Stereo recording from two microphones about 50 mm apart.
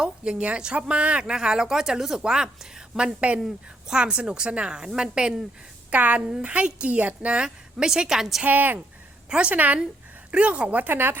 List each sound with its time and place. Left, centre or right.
0.0 s speech: centre
3.2 s speech: right
5.9 s speech: right
6.2 s speech: centre
8.4 s speech: right
9.3 s speech: right
9.6 s speech: right